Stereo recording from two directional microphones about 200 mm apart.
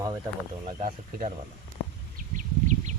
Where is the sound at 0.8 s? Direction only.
40° right (ahead or behind).